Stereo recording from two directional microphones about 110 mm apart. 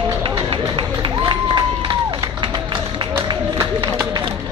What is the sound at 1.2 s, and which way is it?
Crowd, 40° right (ahead or behind).